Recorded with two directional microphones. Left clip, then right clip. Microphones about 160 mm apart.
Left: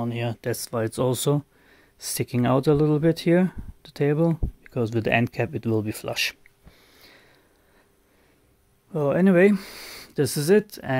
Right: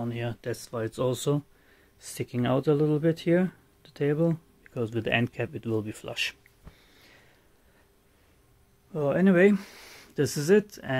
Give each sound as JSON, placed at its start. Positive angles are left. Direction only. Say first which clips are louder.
{"t": 0.0, "sound": "speech", "louder": "left 5 dB", "side_deg": 35}
{"t": 8.9, "sound": "speech", "louder": "left 4 dB", "side_deg": 35}